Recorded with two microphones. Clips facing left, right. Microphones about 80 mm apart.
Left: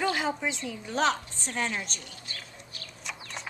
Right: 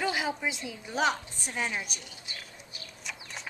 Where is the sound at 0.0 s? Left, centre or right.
Centre.